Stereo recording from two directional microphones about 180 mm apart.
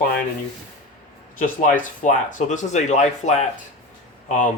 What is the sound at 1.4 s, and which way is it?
Speech, 45° left (ahead or behind).